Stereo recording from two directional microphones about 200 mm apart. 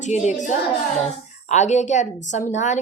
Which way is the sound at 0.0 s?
35° left (ahead or behind).